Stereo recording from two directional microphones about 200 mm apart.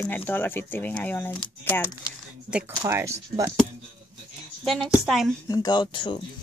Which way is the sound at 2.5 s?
15° right (ahead or behind).